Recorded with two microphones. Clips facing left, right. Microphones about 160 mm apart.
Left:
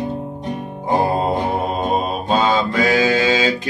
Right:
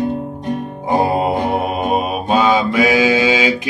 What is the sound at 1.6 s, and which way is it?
Mantra, 15° right (ahead or behind).